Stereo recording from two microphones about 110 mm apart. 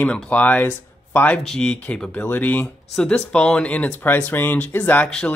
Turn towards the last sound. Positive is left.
turn(degrees=10)  # may be behind; listen again after turning